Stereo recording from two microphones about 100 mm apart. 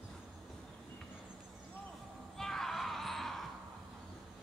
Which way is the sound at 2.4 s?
5° left (ahead or behind).